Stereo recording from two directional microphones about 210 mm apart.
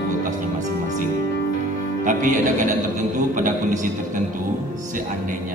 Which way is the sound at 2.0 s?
40° right (ahead or behind).